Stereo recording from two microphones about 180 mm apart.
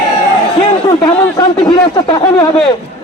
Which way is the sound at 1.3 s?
25° left (ahead or behind).